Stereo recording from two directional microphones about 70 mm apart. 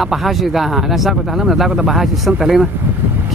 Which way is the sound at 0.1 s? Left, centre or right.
Centre.